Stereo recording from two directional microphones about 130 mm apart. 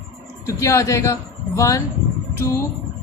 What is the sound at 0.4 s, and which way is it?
A woman's voice, 25° left (ahead or behind).